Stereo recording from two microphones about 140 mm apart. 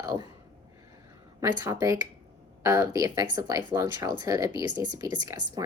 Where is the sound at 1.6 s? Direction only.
25° right (ahead or behind).